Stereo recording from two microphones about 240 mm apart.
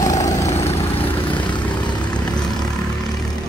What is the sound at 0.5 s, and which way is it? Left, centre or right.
Vehicle, left.